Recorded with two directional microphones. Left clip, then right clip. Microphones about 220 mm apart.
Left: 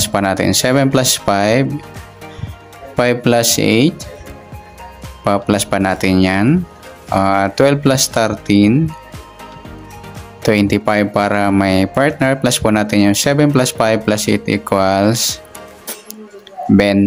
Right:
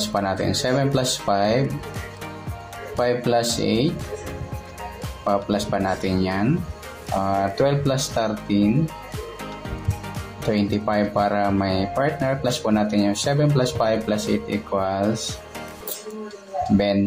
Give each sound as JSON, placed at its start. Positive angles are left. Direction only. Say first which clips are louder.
{"t": 0.1, "sound": "speech", "louder": "left 9 dB", "side_deg": 30}
{"t": 3.0, "sound": "speech", "louder": "left 7 dB", "side_deg": 30}
{"t": 5.2, "sound": "speech", "louder": "left 7 dB", "side_deg": 35}
{"t": 10.5, "sound": "speech", "louder": "left 9 dB", "side_deg": 35}
{"t": 16.7, "sound": "speech", "louder": "left 9 dB", "side_deg": 30}